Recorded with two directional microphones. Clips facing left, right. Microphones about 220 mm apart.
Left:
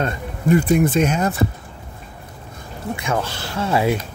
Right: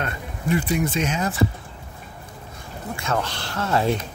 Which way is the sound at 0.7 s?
55° left (ahead or behind).